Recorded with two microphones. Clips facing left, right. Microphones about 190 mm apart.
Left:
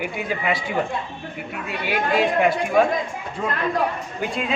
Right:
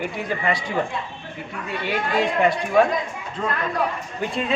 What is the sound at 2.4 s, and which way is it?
Speech, centre (ahead or behind).